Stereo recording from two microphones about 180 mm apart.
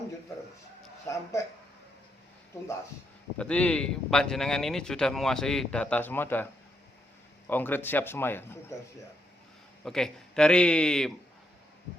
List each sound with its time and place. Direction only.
1.0 s a man's voice: 15° left (ahead or behind)
3.3 s a man's voice: 5° left (ahead or behind)
9.8 s speech: 5° left (ahead or behind)